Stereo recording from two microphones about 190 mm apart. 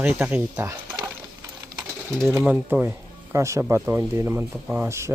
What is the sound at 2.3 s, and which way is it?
Speech, 10° right (ahead or behind).